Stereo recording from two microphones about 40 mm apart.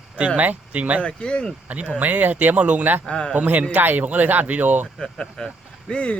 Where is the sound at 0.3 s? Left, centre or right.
Right.